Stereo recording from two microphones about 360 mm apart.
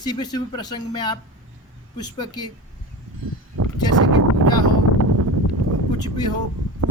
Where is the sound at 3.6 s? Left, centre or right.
Right.